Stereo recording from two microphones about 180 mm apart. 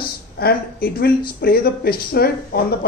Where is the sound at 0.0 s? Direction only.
55° left (ahead or behind).